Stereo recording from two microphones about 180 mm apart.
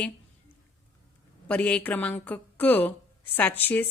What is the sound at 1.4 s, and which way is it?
Speech, 5° left (ahead or behind).